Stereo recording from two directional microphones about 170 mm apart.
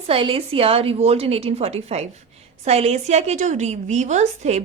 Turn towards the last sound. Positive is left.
turn(degrees=-40)  # may be behind; listen again after turning